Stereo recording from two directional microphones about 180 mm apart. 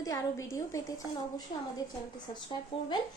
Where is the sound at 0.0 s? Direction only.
20° left (ahead or behind).